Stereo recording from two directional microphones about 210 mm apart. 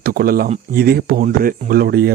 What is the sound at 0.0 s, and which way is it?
Speech, 45° right (ahead or behind).